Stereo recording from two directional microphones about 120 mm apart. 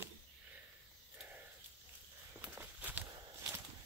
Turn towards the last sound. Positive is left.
turn(degrees=-15)  # may be behind; listen again after turning